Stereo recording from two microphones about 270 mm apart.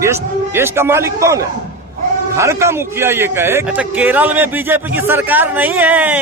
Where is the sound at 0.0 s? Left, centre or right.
Centre.